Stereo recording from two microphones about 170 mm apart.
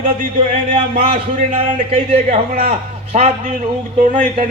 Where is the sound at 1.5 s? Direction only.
35° right (ahead or behind).